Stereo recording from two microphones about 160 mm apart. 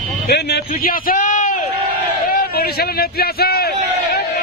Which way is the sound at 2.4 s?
80° left.